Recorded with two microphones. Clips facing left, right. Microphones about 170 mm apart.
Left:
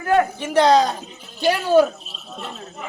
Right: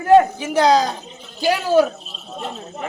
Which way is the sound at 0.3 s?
5° right (ahead or behind).